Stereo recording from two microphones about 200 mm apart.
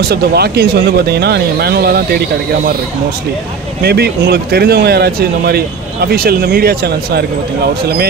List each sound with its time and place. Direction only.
0.1 s speech: 55° right (ahead or behind)
3.8 s speech: 55° right (ahead or behind)